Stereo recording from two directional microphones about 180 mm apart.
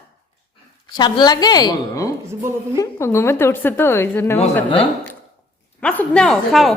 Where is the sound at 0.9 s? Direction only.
25° left (ahead or behind).